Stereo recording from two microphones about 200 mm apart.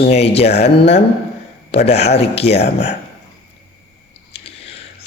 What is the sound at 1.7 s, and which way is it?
Speech, 30° left (ahead or behind).